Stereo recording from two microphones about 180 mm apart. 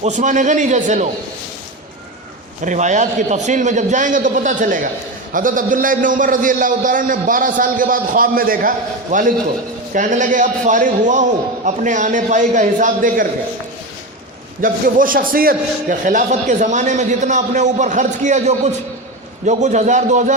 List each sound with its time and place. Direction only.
0.0 s a man's voice: 40° right (ahead or behind)
2.6 s a man's voice: 40° right (ahead or behind)
14.6 s a man's voice: 50° right (ahead or behind)